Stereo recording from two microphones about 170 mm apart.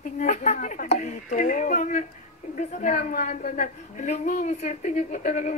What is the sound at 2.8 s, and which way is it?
A woman's voice, 45° left (ahead or behind).